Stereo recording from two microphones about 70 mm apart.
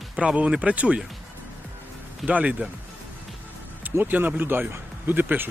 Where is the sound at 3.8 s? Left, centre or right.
Right.